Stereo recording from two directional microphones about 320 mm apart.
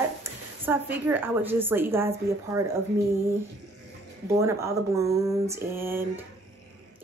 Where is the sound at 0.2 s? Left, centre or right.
Centre.